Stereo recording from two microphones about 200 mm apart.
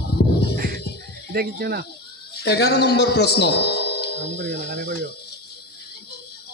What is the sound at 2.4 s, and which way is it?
A man's voice, 55° left (ahead or behind).